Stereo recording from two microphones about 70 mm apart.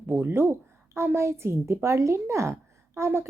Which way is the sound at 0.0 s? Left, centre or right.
Right.